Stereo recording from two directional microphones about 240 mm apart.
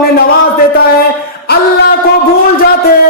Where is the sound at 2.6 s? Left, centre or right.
Left.